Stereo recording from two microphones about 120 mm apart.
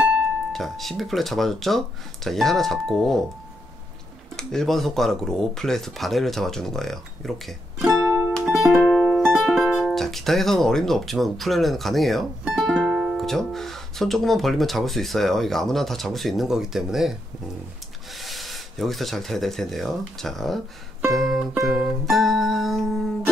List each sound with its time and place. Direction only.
0.5 s speech: centre (ahead or behind)
4.4 s speech: 5° left (ahead or behind)
18.1 s speech: centre (ahead or behind)
21.1 s music: centre (ahead or behind)